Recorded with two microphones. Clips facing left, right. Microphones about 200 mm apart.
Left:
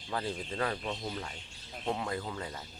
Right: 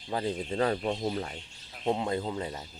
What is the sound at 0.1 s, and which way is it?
Speech, 20° right (ahead or behind).